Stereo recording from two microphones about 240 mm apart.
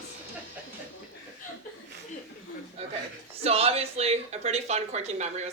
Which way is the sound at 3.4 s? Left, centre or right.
Right.